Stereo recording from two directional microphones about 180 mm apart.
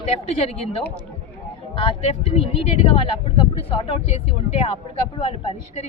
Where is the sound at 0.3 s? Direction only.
35° left (ahead or behind).